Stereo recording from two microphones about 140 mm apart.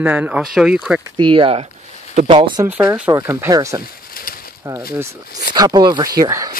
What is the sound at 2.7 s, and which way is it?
Speech, 10° right (ahead or behind).